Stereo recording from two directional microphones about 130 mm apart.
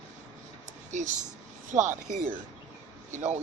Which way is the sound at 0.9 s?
70° right (ahead or behind).